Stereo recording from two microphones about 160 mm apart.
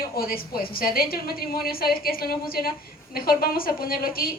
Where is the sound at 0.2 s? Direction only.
65° left (ahead or behind).